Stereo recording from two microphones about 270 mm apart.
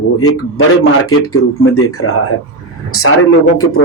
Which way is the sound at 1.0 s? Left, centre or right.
Left.